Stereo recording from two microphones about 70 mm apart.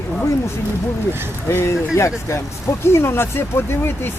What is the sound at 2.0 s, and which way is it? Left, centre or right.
Speech, left.